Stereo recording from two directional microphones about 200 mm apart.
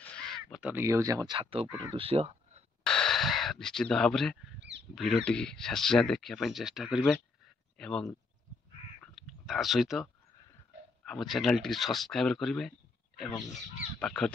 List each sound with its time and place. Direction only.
0.0 s speech: 5° left (ahead or behind); by 2.6 s 30° right (ahead or behind)
2.8 s speech: 5° left (ahead or behind)
4.6 s wild animals: 60° right (ahead or behind)
4.9 s speech: centre (ahead or behind)
9.0 s a sound: centre (ahead or behind)
11.1 s speech: centre (ahead or behind)
13.9 s speech: 5° left (ahead or behind)